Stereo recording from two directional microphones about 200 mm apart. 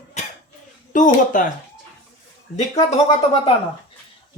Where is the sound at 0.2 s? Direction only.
35° left (ahead or behind).